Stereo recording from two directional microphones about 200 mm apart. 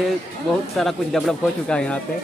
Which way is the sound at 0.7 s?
Centre (ahead or behind).